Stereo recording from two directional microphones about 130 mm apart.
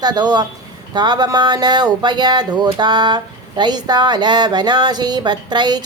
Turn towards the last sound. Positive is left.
turn(degrees=-35)  # may be behind; listen again after turning